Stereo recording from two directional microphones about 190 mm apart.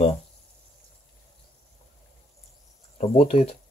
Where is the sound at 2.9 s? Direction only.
35° left (ahead or behind).